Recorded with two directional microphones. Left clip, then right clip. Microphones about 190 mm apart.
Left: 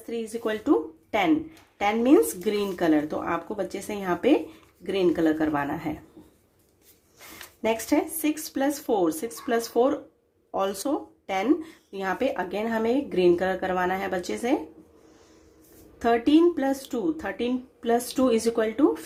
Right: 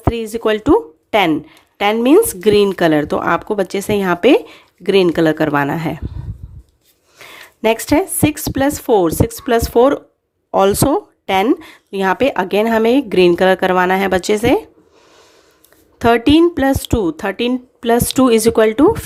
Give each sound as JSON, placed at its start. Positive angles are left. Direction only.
{"t": 0.1, "sound": "speech", "side_deg": -40}
{"t": 7.6, "sound": "speech", "side_deg": -45}
{"t": 16.0, "sound": "speech", "side_deg": -45}